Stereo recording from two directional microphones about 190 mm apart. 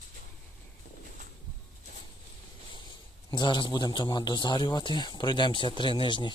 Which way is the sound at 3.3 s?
25° left (ahead or behind).